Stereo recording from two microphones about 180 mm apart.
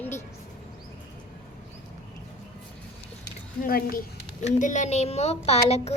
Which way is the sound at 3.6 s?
55° left (ahead or behind).